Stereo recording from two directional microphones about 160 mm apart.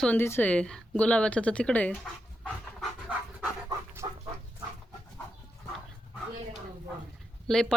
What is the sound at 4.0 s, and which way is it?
Dog, 15° right (ahead or behind).